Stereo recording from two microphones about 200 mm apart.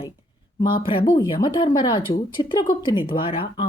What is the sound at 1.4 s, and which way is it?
Speech, 20° left (ahead or behind).